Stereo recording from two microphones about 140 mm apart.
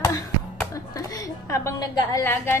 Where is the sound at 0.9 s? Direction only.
20° left (ahead or behind).